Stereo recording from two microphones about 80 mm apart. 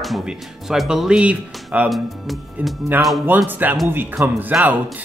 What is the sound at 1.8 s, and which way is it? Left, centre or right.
Speech, centre.